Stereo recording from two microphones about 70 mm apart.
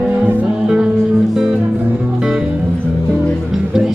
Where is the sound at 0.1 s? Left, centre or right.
Right.